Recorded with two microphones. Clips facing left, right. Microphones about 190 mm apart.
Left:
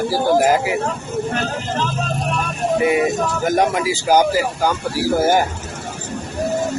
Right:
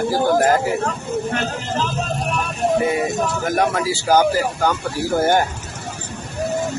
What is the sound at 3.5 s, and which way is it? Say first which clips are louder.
Speech: left 2 dB; 20° left (ahead or behind).